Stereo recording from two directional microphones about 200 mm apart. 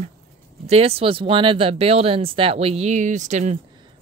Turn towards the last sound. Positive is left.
turn(degrees=-35)  # may be behind; listen again after turning